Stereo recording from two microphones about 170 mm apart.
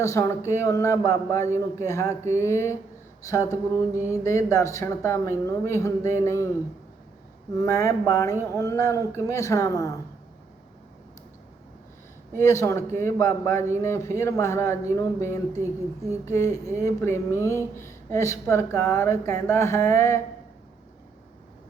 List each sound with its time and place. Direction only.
0.0 s a man's voice: 20° left (ahead or behind)
7.5 s a man's voice: 20° left (ahead or behind)
12.4 s a man's voice: 15° left (ahead or behind)
15.6 s a woman's voice: 15° right (ahead or behind)
16.2 s a man's voice: 15° left (ahead or behind)